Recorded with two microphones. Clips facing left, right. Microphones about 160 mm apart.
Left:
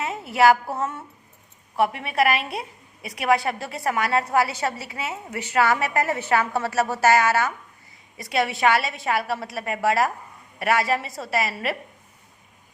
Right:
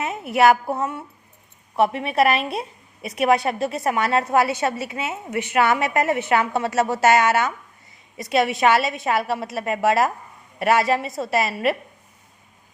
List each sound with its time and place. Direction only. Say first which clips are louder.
0.0 s a woman's voice: right 1 dB; 20° right (ahead or behind)